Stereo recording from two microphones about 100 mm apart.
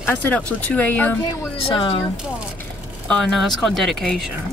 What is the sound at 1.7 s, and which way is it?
Speech, 60° left (ahead or behind).